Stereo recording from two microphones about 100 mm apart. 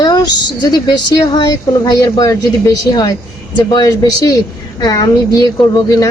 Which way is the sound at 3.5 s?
40° left (ahead or behind).